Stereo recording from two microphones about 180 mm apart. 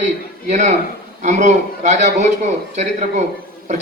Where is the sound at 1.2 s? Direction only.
40° right (ahead or behind).